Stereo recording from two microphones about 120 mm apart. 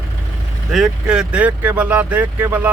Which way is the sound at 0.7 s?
5° right (ahead or behind).